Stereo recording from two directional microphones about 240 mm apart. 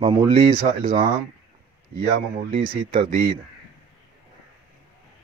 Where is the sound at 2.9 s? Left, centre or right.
Right.